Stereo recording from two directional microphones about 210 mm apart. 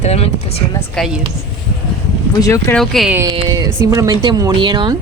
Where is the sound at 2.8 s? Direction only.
Centre (ahead or behind).